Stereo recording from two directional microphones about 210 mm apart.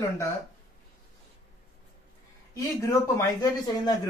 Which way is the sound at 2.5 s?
15° left (ahead or behind).